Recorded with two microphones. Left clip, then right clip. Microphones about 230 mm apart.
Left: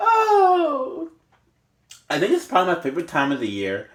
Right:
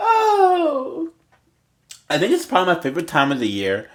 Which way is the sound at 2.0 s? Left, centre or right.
Right.